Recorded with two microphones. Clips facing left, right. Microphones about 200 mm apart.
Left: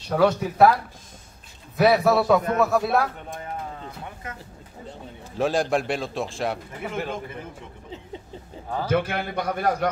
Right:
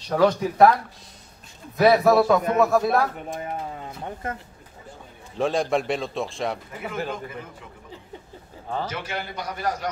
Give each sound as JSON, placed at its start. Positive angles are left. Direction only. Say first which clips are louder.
{"t": 0.1, "sound": "speech", "louder": "right 1 dB", "side_deg": 5}
{"t": 1.8, "sound": "speech", "louder": "right 2 dB", "side_deg": 0}
{"t": 5.4, "sound": "speech", "louder": "even", "side_deg": 0}
{"t": 8.8, "sound": "a man's voice", "louder": "left 7 dB", "side_deg": 55}